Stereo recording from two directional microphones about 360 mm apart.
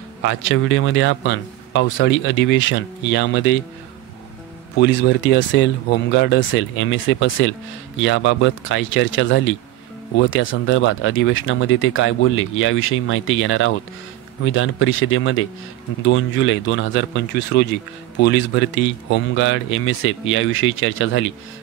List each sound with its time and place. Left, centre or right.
0.2 s speech: left
4.7 s speech: left